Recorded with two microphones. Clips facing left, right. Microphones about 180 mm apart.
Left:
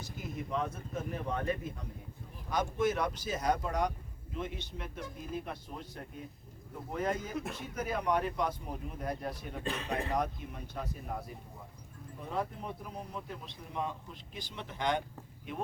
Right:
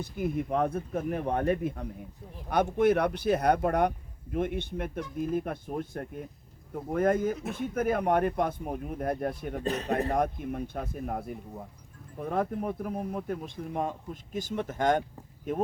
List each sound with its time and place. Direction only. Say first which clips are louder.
0.0 s speech: right 10 dB; 55° right (ahead or behind)